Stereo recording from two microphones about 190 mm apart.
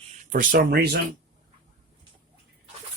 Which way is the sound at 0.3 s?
50° right (ahead or behind).